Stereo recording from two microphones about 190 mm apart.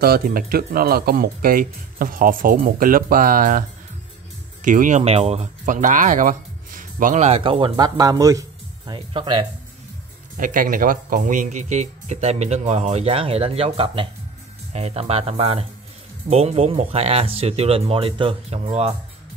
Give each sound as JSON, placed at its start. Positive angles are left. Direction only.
{"t": 0.0, "sound": "speech", "side_deg": -50}
{"t": 10.3, "sound": "speech", "side_deg": -45}